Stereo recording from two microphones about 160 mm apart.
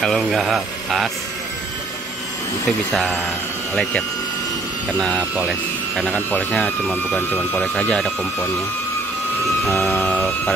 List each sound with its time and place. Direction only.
0.0 s speech: centre (ahead or behind)
2.9 s speech: 5° left (ahead or behind)
4.9 s speech: 5° left (ahead or behind)
9.7 s speech: 15° left (ahead or behind)